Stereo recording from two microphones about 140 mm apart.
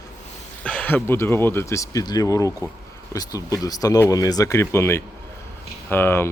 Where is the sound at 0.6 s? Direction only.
10° left (ahead or behind); by 2.5 s 25° left (ahead or behind).